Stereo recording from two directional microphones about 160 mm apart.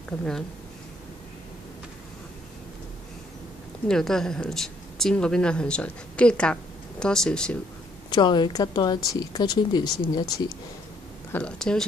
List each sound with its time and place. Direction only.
3.8 s speech: 5° left (ahead or behind)
8.1 s speech: 30° left (ahead or behind)
11.3 s speech: 5° left (ahead or behind)